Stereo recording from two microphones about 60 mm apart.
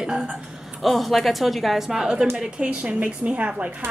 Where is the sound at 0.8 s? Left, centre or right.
Centre; by 3.7 s right.